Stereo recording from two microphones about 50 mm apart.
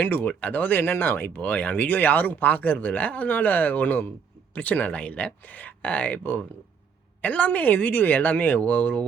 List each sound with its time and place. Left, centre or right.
0.3 s speech: left
1.4 s speech: left